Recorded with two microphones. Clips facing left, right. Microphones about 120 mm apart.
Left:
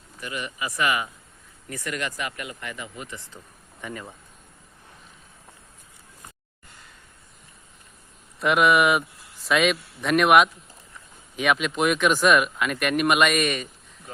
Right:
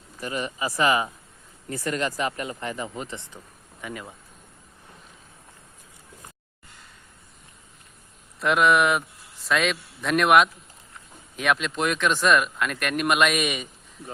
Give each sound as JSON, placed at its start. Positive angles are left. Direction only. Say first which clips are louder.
{"t": 0.2, "sound": "speech", "louder": "right 3 dB", "side_deg": -35}
{"t": 3.8, "sound": "speech", "louder": "even", "side_deg": -5}
{"t": 8.4, "sound": "speech", "louder": "left 1 dB", "side_deg": 5}